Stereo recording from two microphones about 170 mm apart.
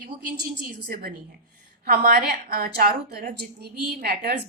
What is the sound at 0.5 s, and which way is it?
A woman's voice, 60° right (ahead or behind).